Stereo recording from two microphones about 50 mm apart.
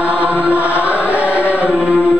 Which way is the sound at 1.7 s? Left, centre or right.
Centre.